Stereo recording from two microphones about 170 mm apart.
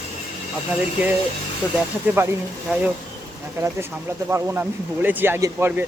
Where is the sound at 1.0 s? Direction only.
10° right (ahead or behind).